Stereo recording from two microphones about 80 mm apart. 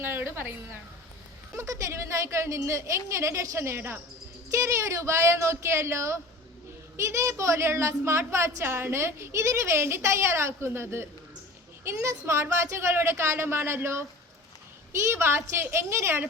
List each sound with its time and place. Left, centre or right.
0.0 s a woman's voice: right